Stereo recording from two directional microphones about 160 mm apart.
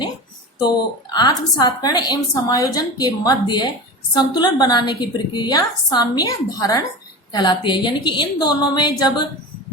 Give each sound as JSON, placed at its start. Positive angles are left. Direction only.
{"t": 1.1, "sound": "a woman's voice", "side_deg": 25}